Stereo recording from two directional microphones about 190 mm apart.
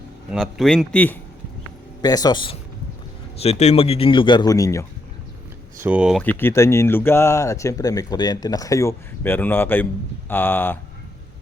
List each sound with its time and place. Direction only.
0.3 s a man's voice: centre (ahead or behind)
2.0 s speech: 20° left (ahead or behind)
5.8 s a man's voice: 5° right (ahead or behind)
6.2 s speech: 15° left (ahead or behind)